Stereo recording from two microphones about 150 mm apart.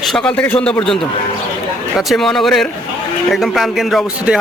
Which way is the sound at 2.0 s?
Centre (ahead or behind).